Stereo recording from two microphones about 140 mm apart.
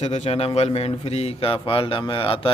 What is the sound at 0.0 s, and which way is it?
A man's voice, 50° left (ahead or behind).